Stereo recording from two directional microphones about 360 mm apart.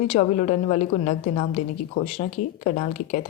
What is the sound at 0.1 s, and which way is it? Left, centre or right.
A woman's voice, centre.